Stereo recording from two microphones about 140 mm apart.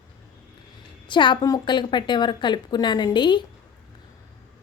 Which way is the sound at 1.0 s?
35° left (ahead or behind).